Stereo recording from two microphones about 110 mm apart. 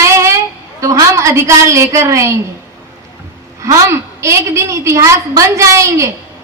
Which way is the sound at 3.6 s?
25° right (ahead or behind).